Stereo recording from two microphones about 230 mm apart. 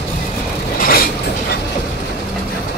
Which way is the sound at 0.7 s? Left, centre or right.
Left.